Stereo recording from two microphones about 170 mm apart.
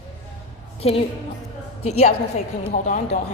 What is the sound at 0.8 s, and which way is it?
Speech, 35° left (ahead or behind).